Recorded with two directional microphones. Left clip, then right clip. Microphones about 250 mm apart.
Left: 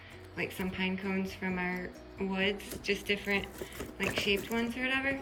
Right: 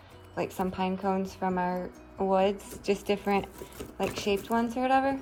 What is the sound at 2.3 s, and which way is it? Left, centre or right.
A woman's voice, centre.